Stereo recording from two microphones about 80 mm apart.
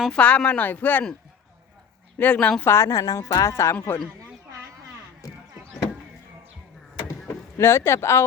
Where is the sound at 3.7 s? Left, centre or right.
Left.